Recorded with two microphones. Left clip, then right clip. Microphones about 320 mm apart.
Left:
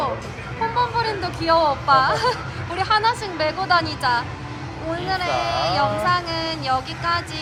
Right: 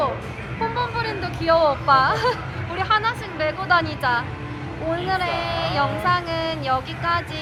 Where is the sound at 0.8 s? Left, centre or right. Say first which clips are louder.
Left 7 dB; centre.